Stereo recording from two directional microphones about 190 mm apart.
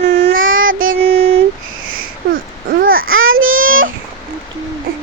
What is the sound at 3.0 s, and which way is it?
Babbling, 90° right.